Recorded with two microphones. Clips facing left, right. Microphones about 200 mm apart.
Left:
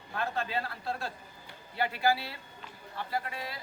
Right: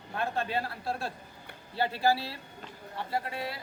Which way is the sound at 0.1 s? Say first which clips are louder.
Right 2 dB; 25° right (ahead or behind).